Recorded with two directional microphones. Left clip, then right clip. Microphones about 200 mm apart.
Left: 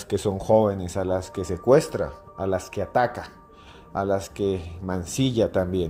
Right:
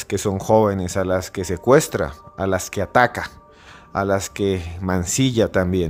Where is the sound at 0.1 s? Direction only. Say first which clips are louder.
Right 3 dB; 20° right (ahead or behind).